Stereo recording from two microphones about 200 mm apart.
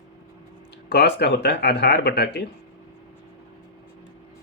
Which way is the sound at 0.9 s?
55° left (ahead or behind).